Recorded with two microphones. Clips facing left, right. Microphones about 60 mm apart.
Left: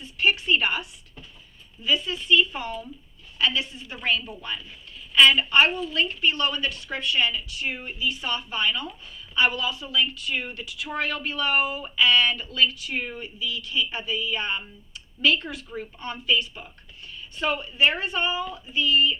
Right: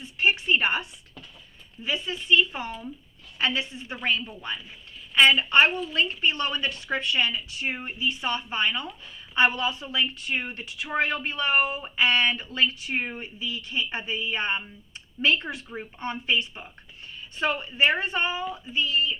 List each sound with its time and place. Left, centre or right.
0.0 s a sound: right
1.8 s a woman's voice: right
5.4 s a woman's voice: right